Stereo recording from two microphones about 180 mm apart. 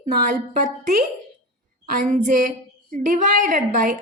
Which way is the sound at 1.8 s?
50° right (ahead or behind).